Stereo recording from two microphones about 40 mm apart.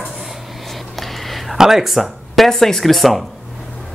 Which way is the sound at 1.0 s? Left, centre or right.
Centre.